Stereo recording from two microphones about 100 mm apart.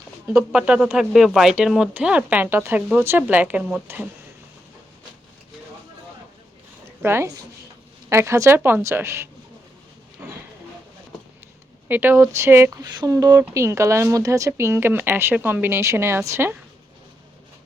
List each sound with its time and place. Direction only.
0.3 s speech: 10° right (ahead or behind)
7.0 s speech: 25° right (ahead or behind)
10.2 s a sound: 15° right (ahead or behind)
11.9 s speech: 20° right (ahead or behind)
12.7 s speech: 40° right (ahead or behind)